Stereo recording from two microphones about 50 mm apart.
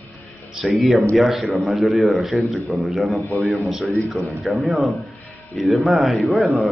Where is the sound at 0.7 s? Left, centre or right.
Centre.